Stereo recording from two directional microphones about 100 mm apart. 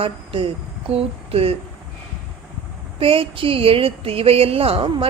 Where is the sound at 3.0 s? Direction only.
65° right (ahead or behind).